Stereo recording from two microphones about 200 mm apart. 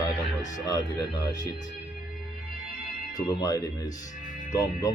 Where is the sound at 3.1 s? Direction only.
15° left (ahead or behind).